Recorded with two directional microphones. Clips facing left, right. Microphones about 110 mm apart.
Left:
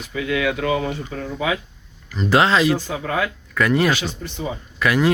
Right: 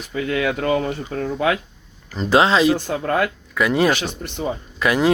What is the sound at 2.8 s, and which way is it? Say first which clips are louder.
Speech: right 3 dB; 60° right (ahead or behind).